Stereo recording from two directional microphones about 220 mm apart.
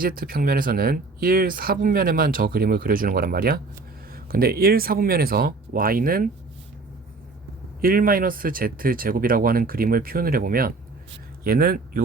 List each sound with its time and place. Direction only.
0.0 s speech: 40° right (ahead or behind)
7.8 s speech: 40° right (ahead or behind)